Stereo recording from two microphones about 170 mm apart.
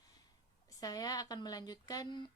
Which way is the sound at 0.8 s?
20° left (ahead or behind).